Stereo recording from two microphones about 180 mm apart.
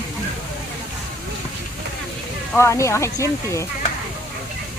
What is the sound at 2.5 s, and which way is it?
Speech, 15° left (ahead or behind).